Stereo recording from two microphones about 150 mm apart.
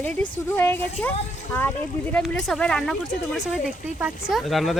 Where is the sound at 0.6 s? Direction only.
15° left (ahead or behind).